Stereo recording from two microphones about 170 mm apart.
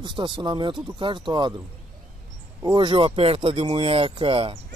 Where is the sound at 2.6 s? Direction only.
30° right (ahead or behind).